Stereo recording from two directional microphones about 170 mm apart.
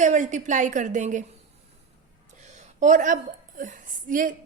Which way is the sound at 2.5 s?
45° right (ahead or behind).